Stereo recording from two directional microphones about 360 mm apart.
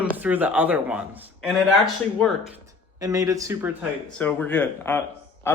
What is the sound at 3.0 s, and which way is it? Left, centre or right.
Speech, centre.